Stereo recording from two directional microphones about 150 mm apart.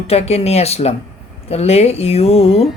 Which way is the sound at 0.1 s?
45° left (ahead or behind).